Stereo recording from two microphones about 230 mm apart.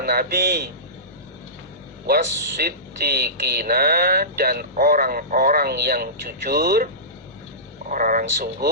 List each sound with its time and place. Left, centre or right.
0.0 s speech: right
2.0 s speech: right